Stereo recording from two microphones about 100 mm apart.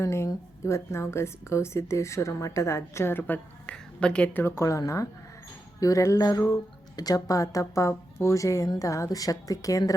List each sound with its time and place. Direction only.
0.0 s a woman's voice: 25° left (ahead or behind); by 4.4 s 10° left (ahead or behind)
4.4 s speech: 30° left (ahead or behind)